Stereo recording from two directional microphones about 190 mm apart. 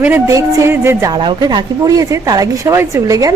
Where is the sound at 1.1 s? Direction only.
25° right (ahead or behind).